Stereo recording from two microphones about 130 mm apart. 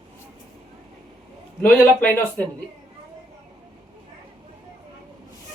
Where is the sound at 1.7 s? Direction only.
10° left (ahead or behind).